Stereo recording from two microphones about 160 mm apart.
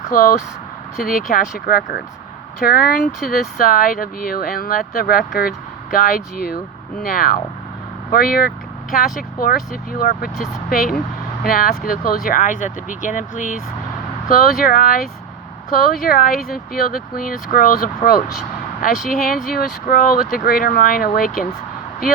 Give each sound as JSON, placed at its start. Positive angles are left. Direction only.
{"t": 0.1, "sound": "speech", "side_deg": 55}
{"t": 10.0, "sound": "speech", "side_deg": 65}
{"t": 16.0, "sound": "speech", "side_deg": 60}